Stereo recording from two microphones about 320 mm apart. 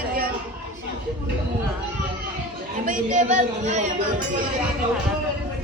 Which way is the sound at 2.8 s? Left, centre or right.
Right.